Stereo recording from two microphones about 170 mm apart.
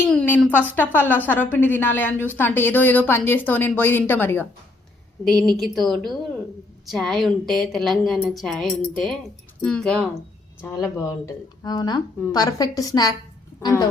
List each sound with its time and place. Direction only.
0.0 s a woman's voice: 10° left (ahead or behind)
13.6 s music: 25° left (ahead or behind)